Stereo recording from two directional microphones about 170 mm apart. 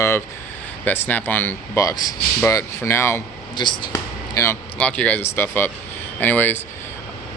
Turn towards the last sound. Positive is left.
turn(degrees=10)  # may be behind; listen again after turning